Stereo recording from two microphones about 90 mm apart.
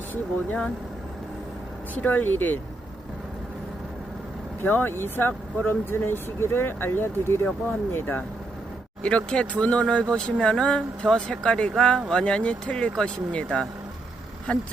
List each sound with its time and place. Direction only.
0.1 s speech: 15° left (ahead or behind)
2.0 s speech: 20° left (ahead or behind)
4.6 s speech: 20° left (ahead or behind)
9.0 s speech: 10° left (ahead or behind)